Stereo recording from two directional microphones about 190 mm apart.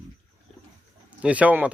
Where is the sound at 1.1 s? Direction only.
5° right (ahead or behind).